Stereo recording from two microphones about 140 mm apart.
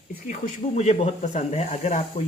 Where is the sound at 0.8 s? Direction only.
60° left (ahead or behind).